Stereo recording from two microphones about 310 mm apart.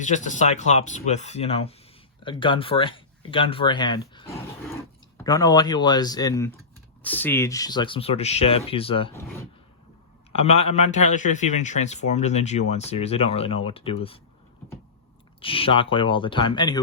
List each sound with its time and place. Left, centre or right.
0.0 s a man's voice: left
10.3 s a man's voice: centre
15.4 s speech: centre